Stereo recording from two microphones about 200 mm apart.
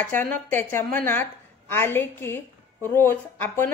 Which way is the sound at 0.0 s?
10° left (ahead or behind).